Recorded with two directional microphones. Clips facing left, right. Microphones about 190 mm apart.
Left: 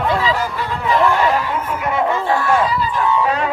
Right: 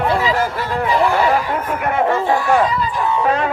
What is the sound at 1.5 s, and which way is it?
Speech, 55° right (ahead or behind).